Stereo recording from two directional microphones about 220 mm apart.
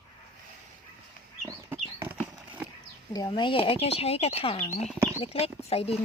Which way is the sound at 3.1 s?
20° left (ahead or behind).